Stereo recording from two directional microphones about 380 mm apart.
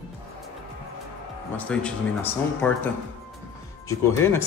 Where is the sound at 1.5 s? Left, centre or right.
Centre.